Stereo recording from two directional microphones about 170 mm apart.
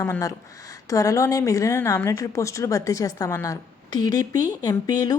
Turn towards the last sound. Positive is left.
turn(degrees=20)  # may be behind; listen again after turning